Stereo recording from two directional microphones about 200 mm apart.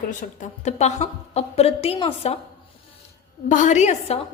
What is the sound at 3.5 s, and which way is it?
Speech, 35° left (ahead or behind).